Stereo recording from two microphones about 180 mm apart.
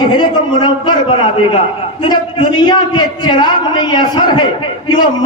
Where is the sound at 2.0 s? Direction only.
30° left (ahead or behind).